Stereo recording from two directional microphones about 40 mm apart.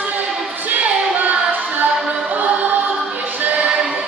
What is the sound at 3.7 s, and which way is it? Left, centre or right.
Music, right.